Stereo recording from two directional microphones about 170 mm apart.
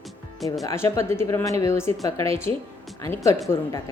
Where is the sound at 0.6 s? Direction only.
15° left (ahead or behind).